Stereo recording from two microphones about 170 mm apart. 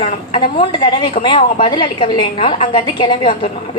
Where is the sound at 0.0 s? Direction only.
35° left (ahead or behind).